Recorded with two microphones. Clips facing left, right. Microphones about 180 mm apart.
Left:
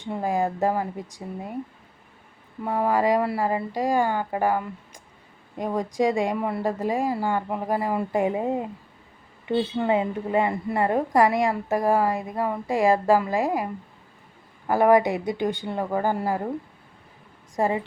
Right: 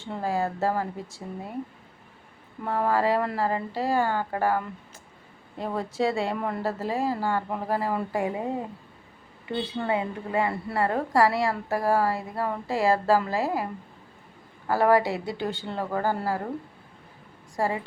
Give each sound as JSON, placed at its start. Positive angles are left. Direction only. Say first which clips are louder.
{"t": 0.0, "sound": "a woman's voice", "louder": "left 3 dB", "side_deg": 15}
{"t": 2.6, "sound": "a woman's voice", "louder": "left 2 dB", "side_deg": 15}
{"t": 14.7, "sound": "a woman's voice", "louder": "left 3 dB", "side_deg": 15}
{"t": 17.6, "sound": "a woman's voice", "louder": "left 3 dB", "side_deg": 20}